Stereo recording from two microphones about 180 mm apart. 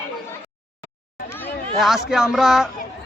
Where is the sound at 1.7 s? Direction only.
Centre (ahead or behind).